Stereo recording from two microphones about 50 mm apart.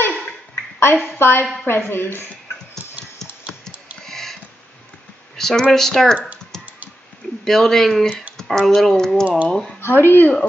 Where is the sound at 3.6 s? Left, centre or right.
Centre.